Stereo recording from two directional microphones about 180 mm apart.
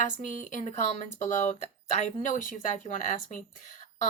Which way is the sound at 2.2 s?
45° left (ahead or behind).